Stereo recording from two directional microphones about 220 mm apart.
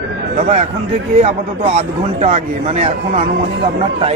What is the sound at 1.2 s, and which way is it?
A man's voice, 30° right (ahead or behind).